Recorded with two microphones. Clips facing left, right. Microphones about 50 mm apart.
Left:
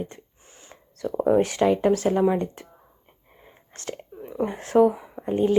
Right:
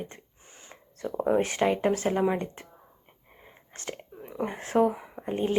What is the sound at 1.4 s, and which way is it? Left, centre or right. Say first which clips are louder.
Speech: left 5 dB; right.